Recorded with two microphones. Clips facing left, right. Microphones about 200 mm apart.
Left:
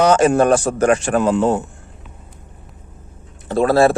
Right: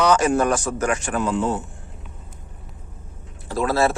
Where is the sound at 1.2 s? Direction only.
60° left (ahead or behind).